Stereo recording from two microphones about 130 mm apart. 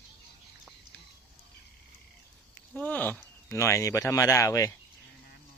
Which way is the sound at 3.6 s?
25° left (ahead or behind).